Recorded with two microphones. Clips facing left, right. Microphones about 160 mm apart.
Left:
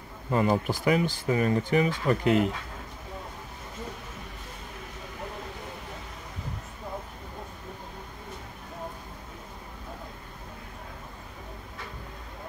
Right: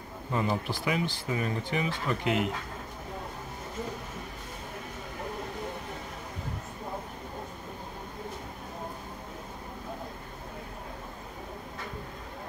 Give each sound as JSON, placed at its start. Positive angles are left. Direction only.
{"t": 0.3, "sound": "speech", "side_deg": 50}